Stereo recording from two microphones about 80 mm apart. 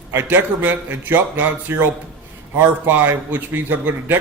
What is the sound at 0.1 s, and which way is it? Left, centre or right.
Speech, right.